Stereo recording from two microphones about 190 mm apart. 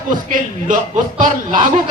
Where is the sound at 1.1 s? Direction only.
40° right (ahead or behind).